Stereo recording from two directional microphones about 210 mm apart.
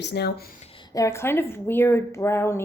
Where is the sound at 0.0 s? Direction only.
50° left (ahead or behind).